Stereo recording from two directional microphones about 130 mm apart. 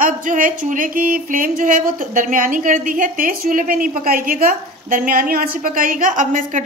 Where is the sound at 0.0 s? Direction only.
90° right.